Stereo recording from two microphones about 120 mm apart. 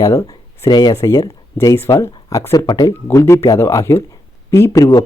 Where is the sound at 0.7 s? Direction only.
35° left (ahead or behind).